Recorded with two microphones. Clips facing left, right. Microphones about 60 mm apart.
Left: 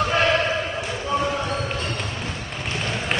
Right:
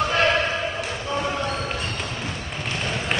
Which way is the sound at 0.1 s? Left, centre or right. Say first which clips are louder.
Left 1 dB; centre.